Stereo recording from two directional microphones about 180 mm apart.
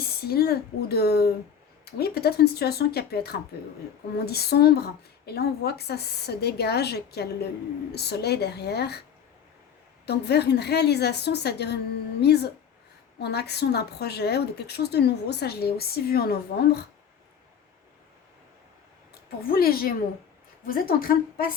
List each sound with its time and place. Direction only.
0.0 s a woman's voice: 60° left (ahead or behind)
10.1 s a woman's voice: 65° left (ahead or behind)
19.4 s a woman's voice: 55° left (ahead or behind)